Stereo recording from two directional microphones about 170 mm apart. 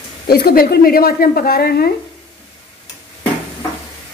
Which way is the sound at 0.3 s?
65° left (ahead or behind).